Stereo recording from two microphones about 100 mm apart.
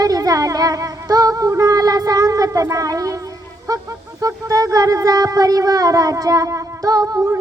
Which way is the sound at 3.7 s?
35° right (ahead or behind).